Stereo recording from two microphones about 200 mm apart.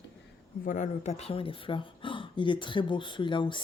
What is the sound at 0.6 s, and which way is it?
Speech, 40° left (ahead or behind).